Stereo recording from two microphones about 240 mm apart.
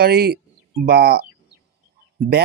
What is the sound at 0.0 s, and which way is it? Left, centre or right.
A man's voice, right.